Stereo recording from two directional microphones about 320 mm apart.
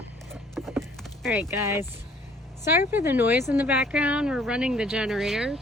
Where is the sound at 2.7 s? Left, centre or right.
Centre.